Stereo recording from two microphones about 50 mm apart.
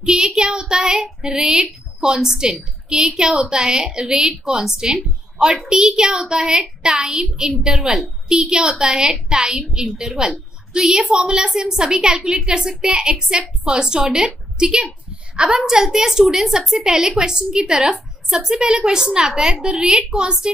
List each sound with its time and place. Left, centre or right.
0.0 s a woman's voice: centre